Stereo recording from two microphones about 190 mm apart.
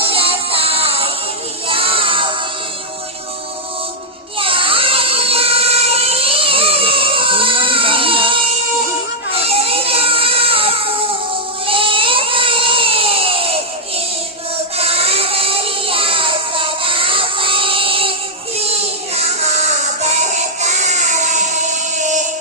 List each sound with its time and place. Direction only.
0.0 s music: 30° right (ahead or behind)
1.6 s child singing: 30° right (ahead or behind)
4.4 s child singing: 30° right (ahead or behind)
9.5 s a sound: 30° right (ahead or behind)
14.8 s child singing: 30° right (ahead or behind)
19.1 s music: 35° right (ahead or behind)